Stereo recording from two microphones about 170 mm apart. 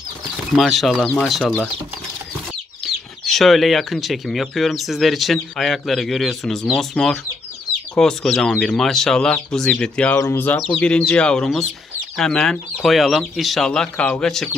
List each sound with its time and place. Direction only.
0.6 s speech: centre (ahead or behind)
2.8 s speech: centre (ahead or behind)